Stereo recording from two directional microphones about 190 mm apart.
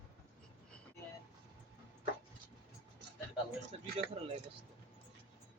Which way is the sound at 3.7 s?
30° right (ahead or behind).